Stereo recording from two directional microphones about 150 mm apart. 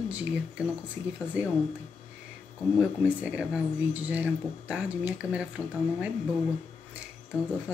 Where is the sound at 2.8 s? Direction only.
10° right (ahead or behind).